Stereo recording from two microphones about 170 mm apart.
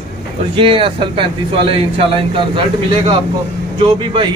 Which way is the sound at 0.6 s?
30° right (ahead or behind).